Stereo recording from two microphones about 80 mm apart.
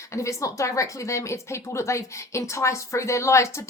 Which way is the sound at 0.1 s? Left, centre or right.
Left.